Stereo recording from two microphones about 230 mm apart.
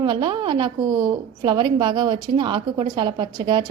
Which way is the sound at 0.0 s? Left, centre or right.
Centre.